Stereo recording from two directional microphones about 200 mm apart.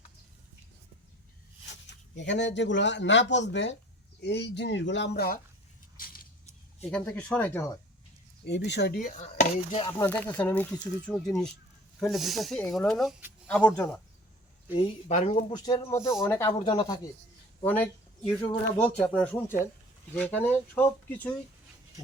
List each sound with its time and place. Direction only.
2.1 s speech: 60° left (ahead or behind)
6.9 s speech: 5° left (ahead or behind)
8.4 s speech: 60° left (ahead or behind); by 9.8 s 35° left (ahead or behind)
10.0 s speech: 10° left (ahead or behind)
14.7 s speech: 30° left (ahead or behind); by 16.5 s 10° left (ahead or behind)
16.5 s speech: 25° left (ahead or behind)
17.6 s speech: 10° left (ahead or behind)